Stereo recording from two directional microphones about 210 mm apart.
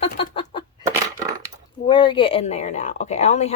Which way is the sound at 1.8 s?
20° left (ahead or behind).